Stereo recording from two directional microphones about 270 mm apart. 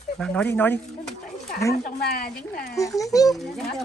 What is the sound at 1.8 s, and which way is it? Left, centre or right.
Speech, left.